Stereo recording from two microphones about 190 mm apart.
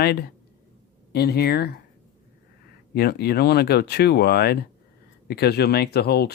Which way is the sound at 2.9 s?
55° left (ahead or behind).